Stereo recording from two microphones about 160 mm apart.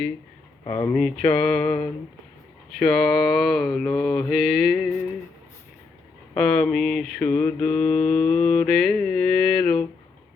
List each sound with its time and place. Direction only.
0.6 s speech: 20° left (ahead or behind)
0.9 s mantra: 5° left (ahead or behind)
6.3 s mantra: 5° left (ahead or behind)